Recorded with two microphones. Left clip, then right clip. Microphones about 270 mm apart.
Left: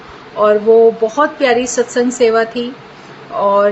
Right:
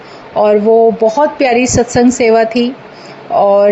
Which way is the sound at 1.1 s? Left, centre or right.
Right.